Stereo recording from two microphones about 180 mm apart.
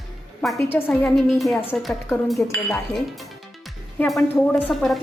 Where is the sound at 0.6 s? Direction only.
10° left (ahead or behind).